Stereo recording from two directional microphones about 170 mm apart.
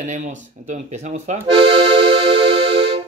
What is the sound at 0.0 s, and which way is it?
Speech, 45° right (ahead or behind).